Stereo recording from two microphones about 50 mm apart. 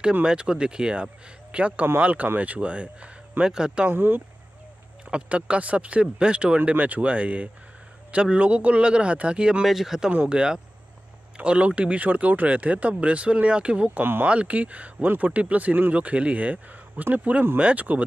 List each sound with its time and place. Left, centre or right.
0.2 s speech: centre
3.9 s speech: right
5.1 s speech: right
9.7 s speech: centre
10.1 s speech: right